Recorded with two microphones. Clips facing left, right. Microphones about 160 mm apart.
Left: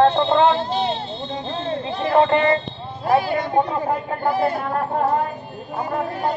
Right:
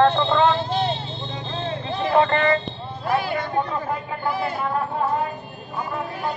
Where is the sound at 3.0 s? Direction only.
40° left (ahead or behind).